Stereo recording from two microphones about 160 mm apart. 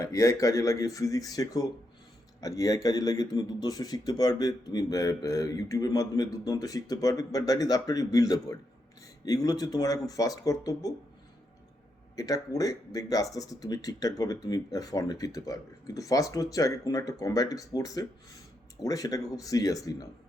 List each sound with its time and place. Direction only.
0.0 s speech: 20° left (ahead or behind)
12.1 s speech: 20° left (ahead or behind)